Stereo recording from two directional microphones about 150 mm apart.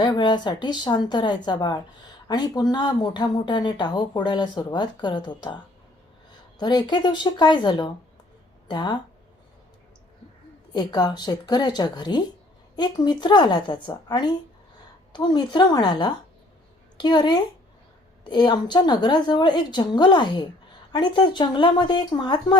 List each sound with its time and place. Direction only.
0.0 s speech: 30° left (ahead or behind)
6.6 s speech: 30° left (ahead or behind)
10.7 s speech: 30° left (ahead or behind)